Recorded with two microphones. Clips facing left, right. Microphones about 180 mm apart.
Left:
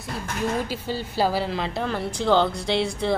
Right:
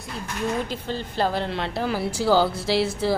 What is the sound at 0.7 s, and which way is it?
Speech, 5° left (ahead or behind).